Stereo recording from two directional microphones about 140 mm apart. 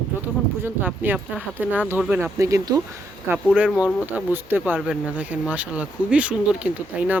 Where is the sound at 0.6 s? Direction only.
15° right (ahead or behind).